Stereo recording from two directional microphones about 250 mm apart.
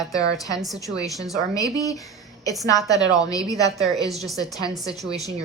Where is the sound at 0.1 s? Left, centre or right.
Centre.